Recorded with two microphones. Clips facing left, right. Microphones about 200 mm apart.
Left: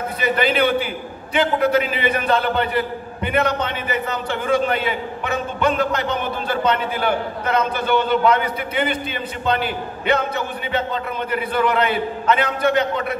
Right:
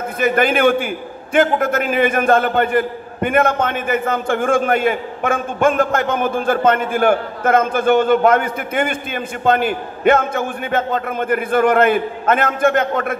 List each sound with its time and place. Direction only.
0.2 s a man's voice: 50° right (ahead or behind)